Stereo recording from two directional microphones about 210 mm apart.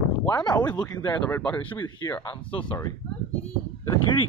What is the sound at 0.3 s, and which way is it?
Speech, 20° left (ahead or behind).